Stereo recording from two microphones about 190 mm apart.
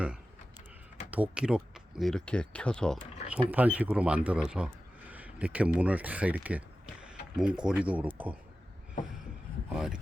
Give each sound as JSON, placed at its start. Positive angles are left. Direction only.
{"t": 1.1, "sound": "speech", "side_deg": -5}
{"t": 3.2, "sound": "speech", "side_deg": -5}
{"t": 9.7, "sound": "speech", "side_deg": -5}